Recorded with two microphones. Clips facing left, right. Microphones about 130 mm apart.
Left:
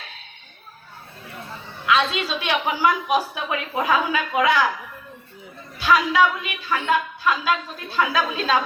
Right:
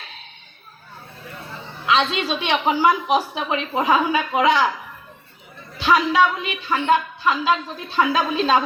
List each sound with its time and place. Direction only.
1.9 s a woman's voice: 20° right (ahead or behind)
5.7 s a sound: 20° right (ahead or behind)
6.4 s a woman's voice: 25° right (ahead or behind)